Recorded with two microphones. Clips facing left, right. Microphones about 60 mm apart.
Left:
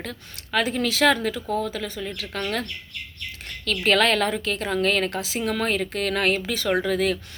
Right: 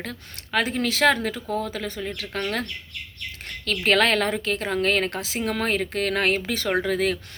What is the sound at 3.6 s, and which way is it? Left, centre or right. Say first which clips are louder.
A woman's voice: even; right.